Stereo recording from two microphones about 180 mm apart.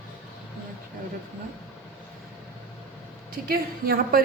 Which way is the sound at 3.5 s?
55° right (ahead or behind).